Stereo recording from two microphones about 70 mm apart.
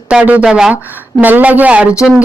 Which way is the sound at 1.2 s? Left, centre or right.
Right.